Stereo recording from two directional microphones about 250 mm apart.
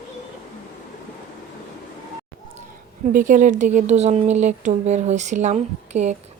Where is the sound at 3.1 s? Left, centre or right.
Right.